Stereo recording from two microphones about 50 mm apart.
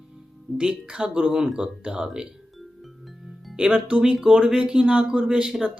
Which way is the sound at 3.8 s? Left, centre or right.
Right.